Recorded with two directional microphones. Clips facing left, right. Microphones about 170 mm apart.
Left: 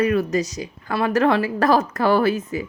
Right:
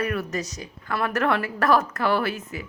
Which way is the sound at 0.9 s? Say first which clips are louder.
Left 5 dB; 30° left (ahead or behind).